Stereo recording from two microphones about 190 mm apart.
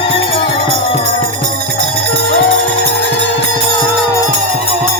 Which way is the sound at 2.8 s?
65° right (ahead or behind).